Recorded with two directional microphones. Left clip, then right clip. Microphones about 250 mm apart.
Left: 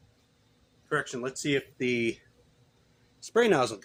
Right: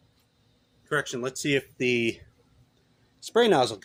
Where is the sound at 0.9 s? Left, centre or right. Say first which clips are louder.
Right 2 dB; right.